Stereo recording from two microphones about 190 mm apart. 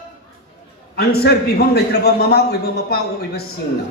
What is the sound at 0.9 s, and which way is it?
Speech, 55° left (ahead or behind).